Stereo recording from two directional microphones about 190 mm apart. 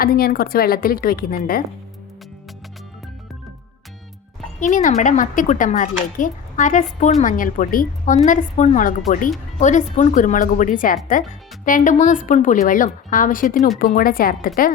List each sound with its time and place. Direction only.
0.0 s speech: 50° left (ahead or behind)
4.6 s speech: 40° left (ahead or behind)